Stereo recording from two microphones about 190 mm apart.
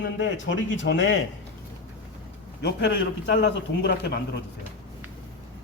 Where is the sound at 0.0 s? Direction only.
75° left (ahead or behind).